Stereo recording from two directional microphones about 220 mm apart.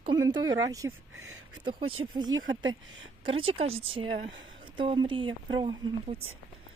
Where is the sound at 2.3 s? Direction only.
60° right (ahead or behind).